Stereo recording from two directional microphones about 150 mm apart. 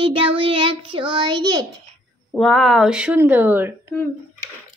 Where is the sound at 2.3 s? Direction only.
Centre (ahead or behind).